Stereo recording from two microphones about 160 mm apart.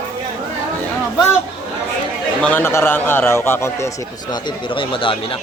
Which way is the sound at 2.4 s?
10° left (ahead or behind).